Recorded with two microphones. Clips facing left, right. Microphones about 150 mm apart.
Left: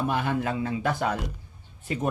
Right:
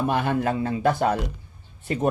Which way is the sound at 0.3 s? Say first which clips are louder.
Right 4 dB; 40° right (ahead or behind).